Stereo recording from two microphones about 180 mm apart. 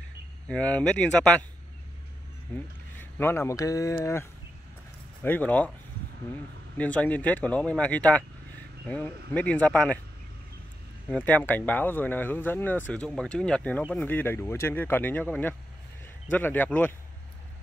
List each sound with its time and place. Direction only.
0.5 s speech: 5° left (ahead or behind)
2.5 s speech: 10° left (ahead or behind)
6.8 s speech: 5° left (ahead or behind)
11.1 s speech: 10° left (ahead or behind)